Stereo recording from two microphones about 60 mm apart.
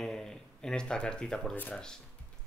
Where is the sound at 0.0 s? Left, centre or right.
Centre.